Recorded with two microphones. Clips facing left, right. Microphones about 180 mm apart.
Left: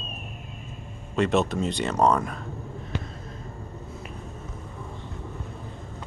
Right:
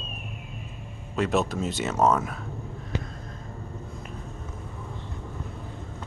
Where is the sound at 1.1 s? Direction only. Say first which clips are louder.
Left 2 dB; centre (ahead or behind).